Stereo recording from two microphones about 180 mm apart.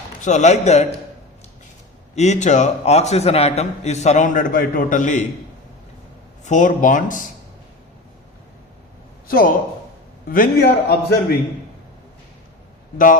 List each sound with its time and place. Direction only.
0.2 s a man's voice: 40° left (ahead or behind)
2.1 s a man's voice: 40° left (ahead or behind)
6.4 s speech: 45° left (ahead or behind)
9.2 s a man's voice: 50° left (ahead or behind)